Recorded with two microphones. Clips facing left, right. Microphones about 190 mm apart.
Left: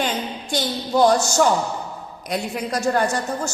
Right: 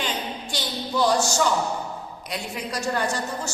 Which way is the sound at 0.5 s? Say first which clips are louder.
Left 7 dB; 50° left (ahead or behind).